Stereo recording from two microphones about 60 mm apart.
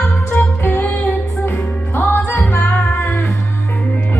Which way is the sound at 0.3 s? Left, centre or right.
Left.